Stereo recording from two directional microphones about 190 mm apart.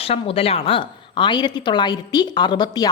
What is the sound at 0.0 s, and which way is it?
A woman's voice, 30° left (ahead or behind).